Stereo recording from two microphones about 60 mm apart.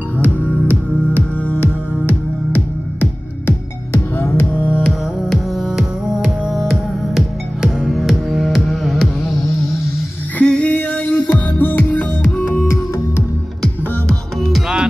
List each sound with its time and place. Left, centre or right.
0.2 s music: left
4.5 s music: left
5.3 s music: centre
5.7 s music: centre
10.4 s music: centre